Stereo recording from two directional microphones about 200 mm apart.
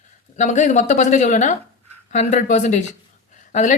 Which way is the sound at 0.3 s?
35° left (ahead or behind).